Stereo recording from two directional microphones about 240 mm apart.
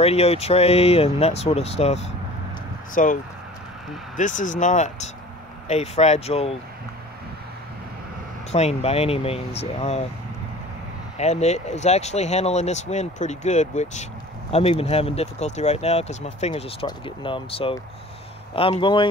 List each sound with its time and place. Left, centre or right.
0.0 s speech: left
4.2 s speech: left
8.5 s speech: left
11.1 s speech: left